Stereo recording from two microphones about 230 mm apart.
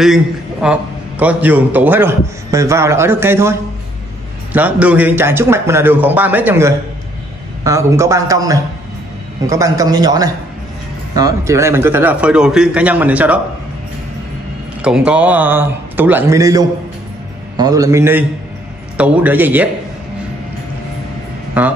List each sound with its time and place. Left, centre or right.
0.0 s a man's voice: centre
14.8 s a man's voice: centre
21.6 s speech: centre